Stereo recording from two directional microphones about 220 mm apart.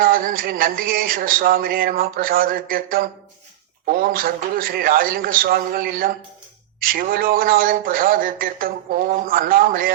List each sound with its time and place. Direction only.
0.0 s speech: 40° right (ahead or behind)